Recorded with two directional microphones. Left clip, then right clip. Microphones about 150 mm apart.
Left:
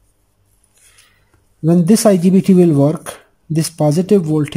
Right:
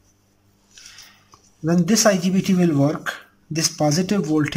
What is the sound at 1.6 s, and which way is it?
Speech, 30° left (ahead or behind).